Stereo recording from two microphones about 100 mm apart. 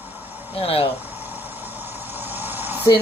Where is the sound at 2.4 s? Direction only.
20° right (ahead or behind).